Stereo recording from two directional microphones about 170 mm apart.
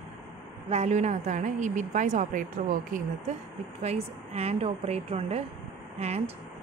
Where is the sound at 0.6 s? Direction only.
40° right (ahead or behind).